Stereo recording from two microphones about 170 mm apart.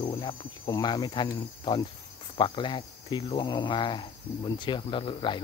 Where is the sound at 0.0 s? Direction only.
30° left (ahead or behind).